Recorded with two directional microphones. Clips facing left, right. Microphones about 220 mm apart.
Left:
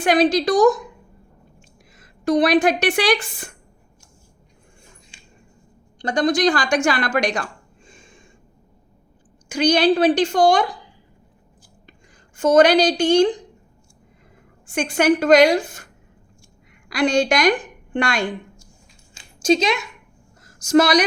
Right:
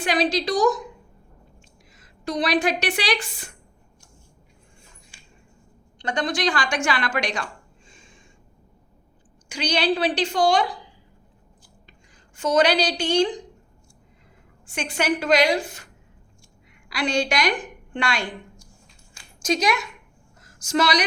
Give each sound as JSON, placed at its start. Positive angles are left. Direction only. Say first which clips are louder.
{"t": 0.0, "sound": "a woman's voice", "louder": "left 6 dB", "side_deg": 50}
{"t": 2.0, "sound": "a woman's voice", "louder": "left 9 dB", "side_deg": 50}
{"t": 6.0, "sound": "a woman's voice", "louder": "left 7 dB", "side_deg": 40}
{"t": 7.9, "sound": "a sound", "louder": "left 4 dB", "side_deg": 50}
{"t": 9.5, "sound": "a woman's voice", "louder": "left 7 dB", "side_deg": 45}
{"t": 12.4, "sound": "a woman's voice", "louder": "left 6 dB", "side_deg": 50}
{"t": 14.7, "sound": "a woman's voice", "louder": "left 7 dB", "side_deg": 50}
{"t": 16.9, "sound": "a woman's voice", "louder": "left 6 dB", "side_deg": 45}
{"t": 19.1, "sound": "a sound", "louder": "left 7 dB", "side_deg": 25}
{"t": 20.4, "sound": "a sound", "louder": "left 7 dB", "side_deg": 45}